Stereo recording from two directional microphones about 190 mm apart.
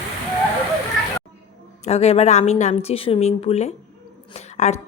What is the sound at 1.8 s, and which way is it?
Speech, 35° left (ahead or behind).